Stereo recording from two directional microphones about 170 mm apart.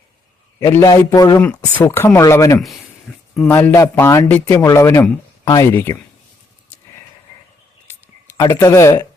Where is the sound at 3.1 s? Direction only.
Centre (ahead or behind).